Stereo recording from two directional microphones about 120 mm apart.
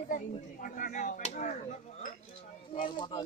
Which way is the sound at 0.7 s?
90° left.